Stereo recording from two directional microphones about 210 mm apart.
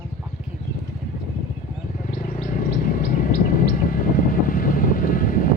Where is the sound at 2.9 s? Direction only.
40° left (ahead or behind).